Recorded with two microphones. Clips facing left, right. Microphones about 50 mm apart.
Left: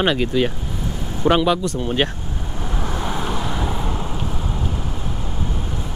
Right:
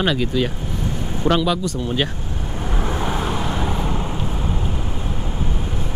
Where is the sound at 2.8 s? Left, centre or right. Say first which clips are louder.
Right 2 dB; centre.